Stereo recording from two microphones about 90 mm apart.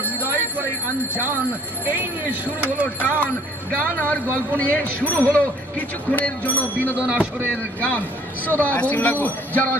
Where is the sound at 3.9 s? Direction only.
20° left (ahead or behind).